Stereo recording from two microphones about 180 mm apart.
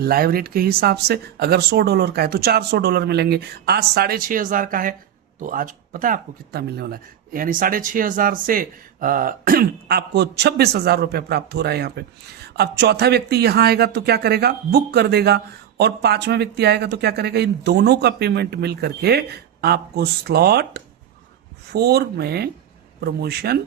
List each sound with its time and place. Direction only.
0.0 s speech: 55° right (ahead or behind)